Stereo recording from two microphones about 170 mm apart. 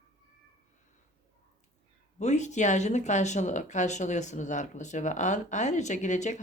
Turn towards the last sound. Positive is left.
turn(degrees=45)  # may be behind; listen again after turning